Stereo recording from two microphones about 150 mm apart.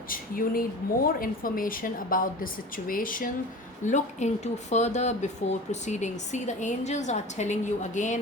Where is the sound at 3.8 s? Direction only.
50° left (ahead or behind).